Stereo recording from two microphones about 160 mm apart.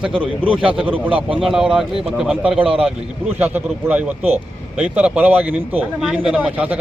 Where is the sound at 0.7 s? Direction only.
10° right (ahead or behind).